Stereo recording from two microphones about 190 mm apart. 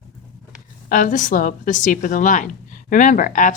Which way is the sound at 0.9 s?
45° left (ahead or behind).